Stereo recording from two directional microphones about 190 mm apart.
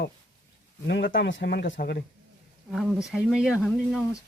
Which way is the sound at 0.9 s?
65° left (ahead or behind).